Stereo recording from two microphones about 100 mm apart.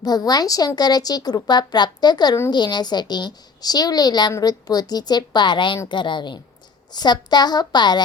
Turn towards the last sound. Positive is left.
turn(degrees=45)  # may be behind; listen again after turning